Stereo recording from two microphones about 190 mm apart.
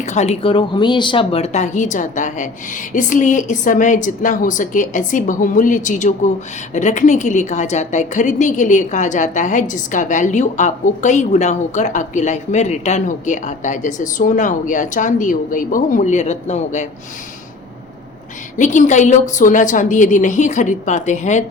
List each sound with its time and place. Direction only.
0.0 s a woman's voice: 35° left (ahead or behind)
18.5 s a woman's voice: 40° left (ahead or behind)